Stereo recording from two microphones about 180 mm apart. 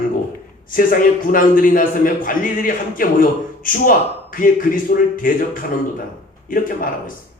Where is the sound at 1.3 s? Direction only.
50° left (ahead or behind).